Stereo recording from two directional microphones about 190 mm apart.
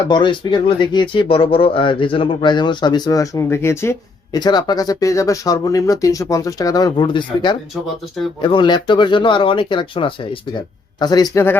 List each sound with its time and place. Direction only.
0.1 s speech: 25° left (ahead or behind)